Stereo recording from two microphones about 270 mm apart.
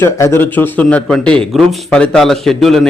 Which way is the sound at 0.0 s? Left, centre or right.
Centre.